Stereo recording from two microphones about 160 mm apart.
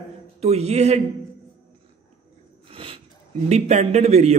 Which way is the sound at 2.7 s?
35° right (ahead or behind).